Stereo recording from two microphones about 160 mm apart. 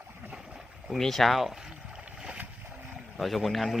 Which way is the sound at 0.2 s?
5° right (ahead or behind).